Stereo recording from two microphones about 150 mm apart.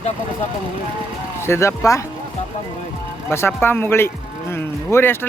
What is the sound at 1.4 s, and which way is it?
Speech, 20° left (ahead or behind).